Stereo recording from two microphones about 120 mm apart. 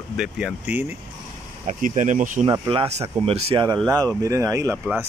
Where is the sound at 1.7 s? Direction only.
90° right.